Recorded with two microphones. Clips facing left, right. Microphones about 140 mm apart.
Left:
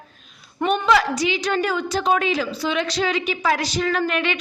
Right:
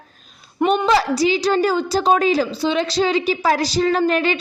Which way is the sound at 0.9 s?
35° right (ahead or behind).